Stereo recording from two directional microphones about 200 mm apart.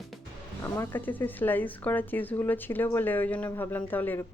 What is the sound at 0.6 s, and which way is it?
Speech, 10° left (ahead or behind).